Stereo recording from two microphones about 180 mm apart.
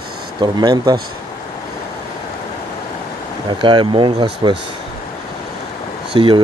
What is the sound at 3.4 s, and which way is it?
Speech, 25° right (ahead or behind).